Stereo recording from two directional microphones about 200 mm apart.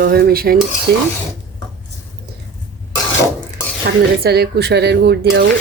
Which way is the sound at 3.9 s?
50° right (ahead or behind).